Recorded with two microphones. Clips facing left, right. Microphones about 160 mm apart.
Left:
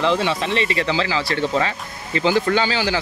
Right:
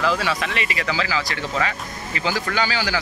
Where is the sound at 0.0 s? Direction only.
25° left (ahead or behind).